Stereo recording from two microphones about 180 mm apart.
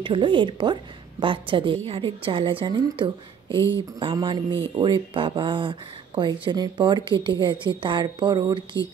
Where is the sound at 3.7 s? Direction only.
25° right (ahead or behind).